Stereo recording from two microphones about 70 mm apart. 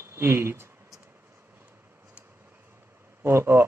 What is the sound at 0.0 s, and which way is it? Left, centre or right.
Speech, right.